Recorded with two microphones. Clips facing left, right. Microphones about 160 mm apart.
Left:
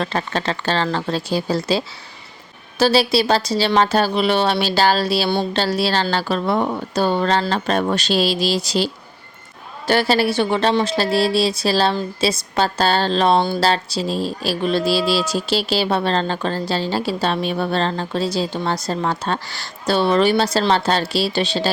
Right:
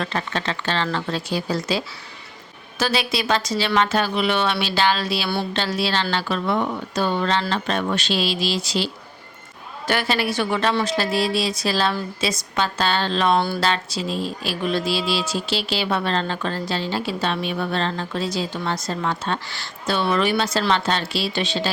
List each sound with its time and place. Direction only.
0.0 s speech: 35° left (ahead or behind)